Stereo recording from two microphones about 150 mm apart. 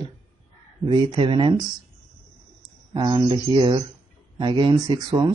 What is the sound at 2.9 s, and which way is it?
Speech, 25° right (ahead or behind).